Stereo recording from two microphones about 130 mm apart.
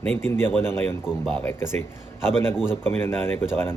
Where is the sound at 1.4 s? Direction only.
20° left (ahead or behind).